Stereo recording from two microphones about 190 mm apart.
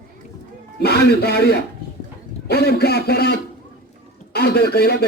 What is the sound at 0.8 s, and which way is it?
A man's voice, 60° left (ahead or behind).